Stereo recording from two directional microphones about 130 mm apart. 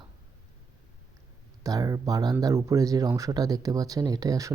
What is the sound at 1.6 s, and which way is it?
Speech, 30° right (ahead or behind).